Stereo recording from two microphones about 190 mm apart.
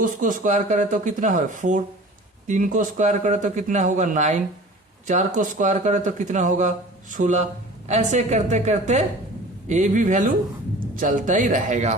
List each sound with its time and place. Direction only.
0.0 s speech: 45° right (ahead or behind)